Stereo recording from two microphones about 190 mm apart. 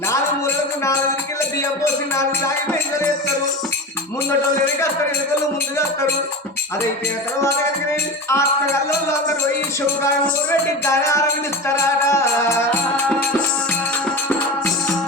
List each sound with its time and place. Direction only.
0.1 s music: 15° left (ahead or behind)
8.3 s music: 15° left (ahead or behind)
10.0 s music: 15° left (ahead or behind)